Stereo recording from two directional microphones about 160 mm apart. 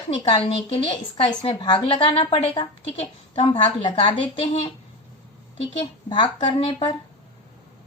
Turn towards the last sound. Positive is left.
turn(degrees=35)  # may be behind; listen again after turning